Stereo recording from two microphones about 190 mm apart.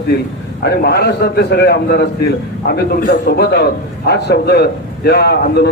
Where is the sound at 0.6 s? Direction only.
60° left (ahead or behind).